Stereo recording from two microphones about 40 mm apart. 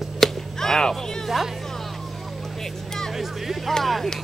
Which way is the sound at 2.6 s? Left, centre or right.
Centre.